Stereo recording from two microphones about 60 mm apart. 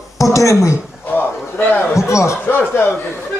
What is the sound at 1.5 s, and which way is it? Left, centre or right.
Speech, left.